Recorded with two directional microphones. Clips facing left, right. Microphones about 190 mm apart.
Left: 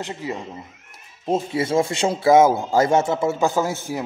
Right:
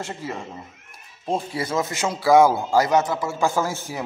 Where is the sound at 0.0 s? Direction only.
15° left (ahead or behind).